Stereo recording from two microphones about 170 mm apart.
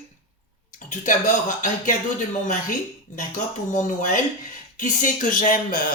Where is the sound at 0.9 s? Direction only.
50° left (ahead or behind).